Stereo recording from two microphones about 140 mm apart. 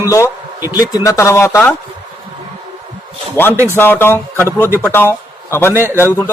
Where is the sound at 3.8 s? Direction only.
15° left (ahead or behind).